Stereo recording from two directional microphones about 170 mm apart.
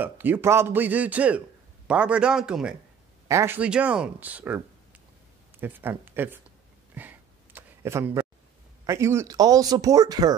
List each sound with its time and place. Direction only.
0.0 s a man's voice: 10° right (ahead or behind)
3.3 s a man's voice: 15° right (ahead or behind)
5.6 s a man's voice: 10° right (ahead or behind)
7.0 s a sound: 10° right (ahead or behind)
8.8 s speech: 15° right (ahead or behind)